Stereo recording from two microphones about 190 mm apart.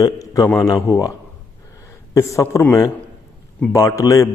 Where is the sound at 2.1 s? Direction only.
15° left (ahead or behind).